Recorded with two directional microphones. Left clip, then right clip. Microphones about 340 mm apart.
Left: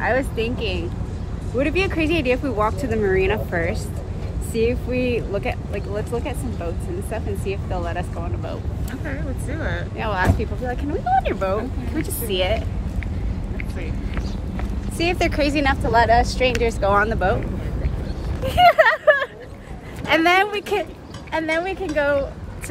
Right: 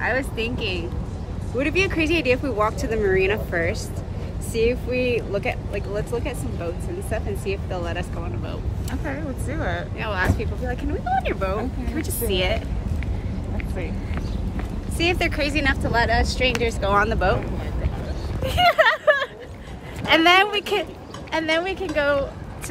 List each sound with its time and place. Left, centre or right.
0.0 s speech: centre
9.0 s speech: centre
9.9 s speech: centre
15.0 s speech: centre
18.6 s a sound: centre
20.1 s speech: centre